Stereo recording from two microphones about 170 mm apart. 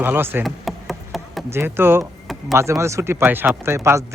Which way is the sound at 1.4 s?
15° right (ahead or behind).